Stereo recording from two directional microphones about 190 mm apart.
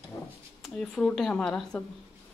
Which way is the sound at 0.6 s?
Centre (ahead or behind).